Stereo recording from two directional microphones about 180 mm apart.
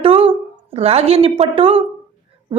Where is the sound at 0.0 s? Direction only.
30° right (ahead or behind).